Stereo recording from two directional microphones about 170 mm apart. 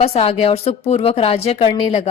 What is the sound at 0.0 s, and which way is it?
Speech, 35° left (ahead or behind).